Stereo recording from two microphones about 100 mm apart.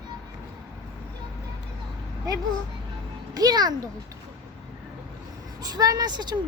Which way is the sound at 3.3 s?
40° right (ahead or behind).